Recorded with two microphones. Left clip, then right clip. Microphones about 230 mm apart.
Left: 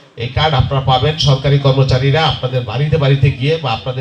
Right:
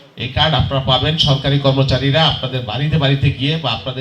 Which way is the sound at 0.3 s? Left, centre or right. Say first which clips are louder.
Left 1 dB; right.